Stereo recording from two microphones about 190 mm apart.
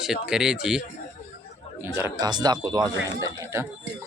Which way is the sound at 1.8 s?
15° right (ahead or behind).